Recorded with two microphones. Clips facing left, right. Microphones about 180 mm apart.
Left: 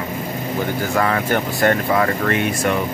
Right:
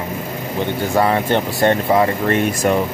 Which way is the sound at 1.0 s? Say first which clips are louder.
Right 4 dB; 25° right (ahead or behind).